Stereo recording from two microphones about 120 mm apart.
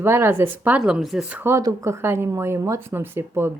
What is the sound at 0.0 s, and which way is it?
Speech, 20° right (ahead or behind).